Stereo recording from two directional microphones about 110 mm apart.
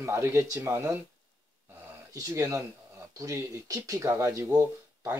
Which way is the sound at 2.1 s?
30° right (ahead or behind).